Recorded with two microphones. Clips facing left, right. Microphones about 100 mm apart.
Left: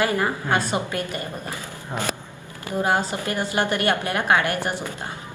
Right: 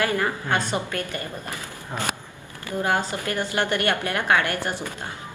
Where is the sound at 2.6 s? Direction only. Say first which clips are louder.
Left 2 dB; 20° left (ahead or behind).